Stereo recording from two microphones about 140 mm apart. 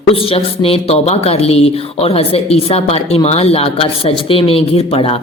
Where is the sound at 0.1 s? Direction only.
40° left (ahead or behind).